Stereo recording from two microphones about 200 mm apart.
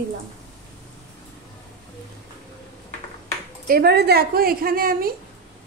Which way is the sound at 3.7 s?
55° right (ahead or behind).